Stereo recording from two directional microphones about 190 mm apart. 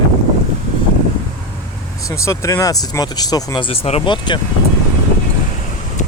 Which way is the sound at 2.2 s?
15° left (ahead or behind).